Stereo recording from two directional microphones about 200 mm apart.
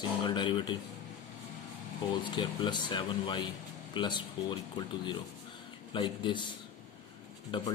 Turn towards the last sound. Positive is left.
turn(degrees=25)  # may be behind; listen again after turning